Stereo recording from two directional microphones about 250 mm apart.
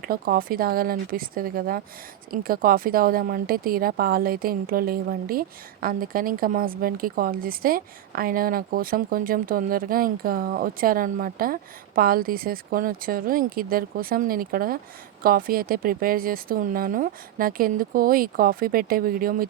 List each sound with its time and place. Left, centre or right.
0.0 s speech: right